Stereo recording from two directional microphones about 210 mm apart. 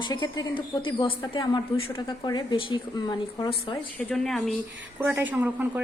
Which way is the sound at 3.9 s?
5° left (ahead or behind).